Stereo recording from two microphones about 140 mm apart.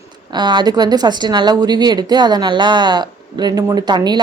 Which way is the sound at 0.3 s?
30° right (ahead or behind).